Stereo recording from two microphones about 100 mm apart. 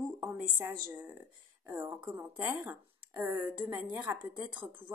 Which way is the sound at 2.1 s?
25° right (ahead or behind).